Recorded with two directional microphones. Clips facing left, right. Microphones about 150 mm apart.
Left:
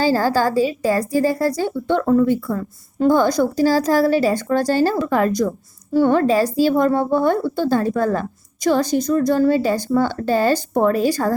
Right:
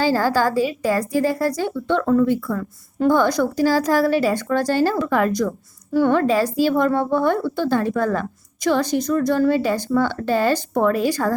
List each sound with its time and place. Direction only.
0.0 s a woman's voice: 40° left (ahead or behind)